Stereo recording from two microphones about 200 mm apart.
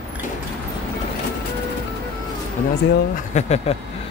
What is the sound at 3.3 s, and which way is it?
Speech, 35° left (ahead or behind).